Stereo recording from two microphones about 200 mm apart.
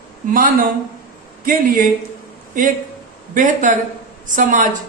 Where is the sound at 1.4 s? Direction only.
45° right (ahead or behind).